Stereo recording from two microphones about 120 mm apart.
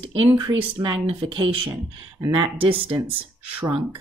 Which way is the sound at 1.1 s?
50° right (ahead or behind).